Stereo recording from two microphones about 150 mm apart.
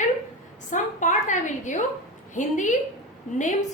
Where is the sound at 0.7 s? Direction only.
55° left (ahead or behind).